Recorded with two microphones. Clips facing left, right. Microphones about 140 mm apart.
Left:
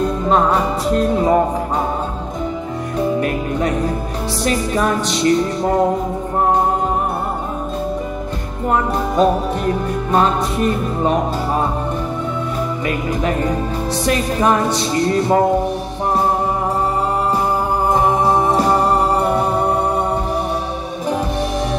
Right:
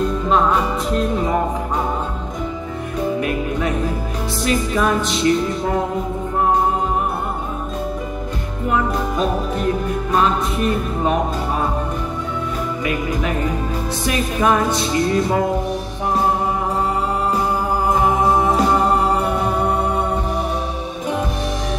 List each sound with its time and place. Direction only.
3.2 s music: 35° left (ahead or behind)
8.6 s music: 35° left (ahead or behind)
14.0 s music: 35° left (ahead or behind)
17.9 s music: 30° left (ahead or behind)